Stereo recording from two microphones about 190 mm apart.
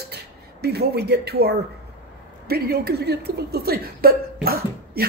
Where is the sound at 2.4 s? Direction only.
55° right (ahead or behind).